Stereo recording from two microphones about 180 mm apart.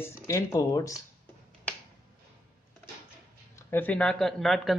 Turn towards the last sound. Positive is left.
turn(degrees=0)  # may be behind; listen again after turning